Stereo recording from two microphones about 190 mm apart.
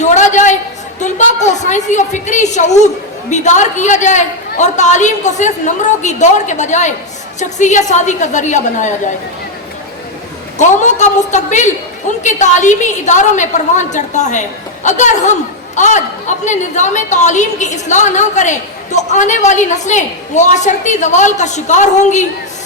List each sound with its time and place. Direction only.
0.0 s a sound: 40° left (ahead or behind)
0.9 s a woman's voice: 40° left (ahead or behind)
10.6 s a woman's voice: 40° left (ahead or behind)